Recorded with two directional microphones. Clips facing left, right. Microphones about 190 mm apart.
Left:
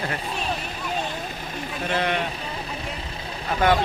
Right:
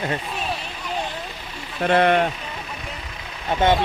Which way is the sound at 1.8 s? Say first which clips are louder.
Right 8 dB; 55° right (ahead or behind).